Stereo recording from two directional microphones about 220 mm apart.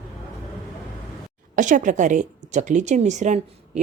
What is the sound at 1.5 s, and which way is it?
Speech, 35° right (ahead or behind).